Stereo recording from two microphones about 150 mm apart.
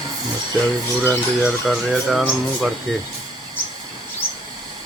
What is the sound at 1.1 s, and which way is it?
Speech, 5° right (ahead or behind).